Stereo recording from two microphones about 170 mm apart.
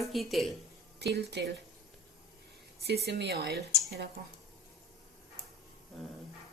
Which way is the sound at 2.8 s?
70° right (ahead or behind).